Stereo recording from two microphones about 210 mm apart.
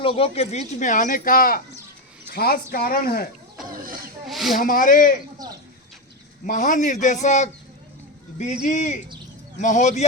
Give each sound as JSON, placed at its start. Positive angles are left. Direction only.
{"t": 0.0, "sound": "speech", "side_deg": 25}
{"t": 4.3, "sound": "speech", "side_deg": 0}
{"t": 4.5, "sound": "speech", "side_deg": 40}
{"t": 6.4, "sound": "speech", "side_deg": 40}
{"t": 8.6, "sound": "speech", "side_deg": 35}